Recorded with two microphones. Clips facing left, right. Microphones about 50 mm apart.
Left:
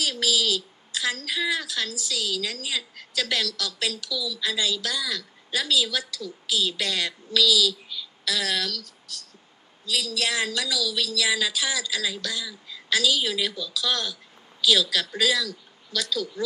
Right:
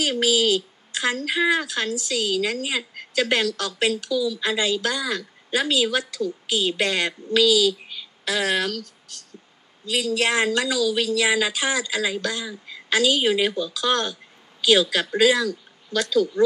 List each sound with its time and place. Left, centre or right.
0.0 s speech: right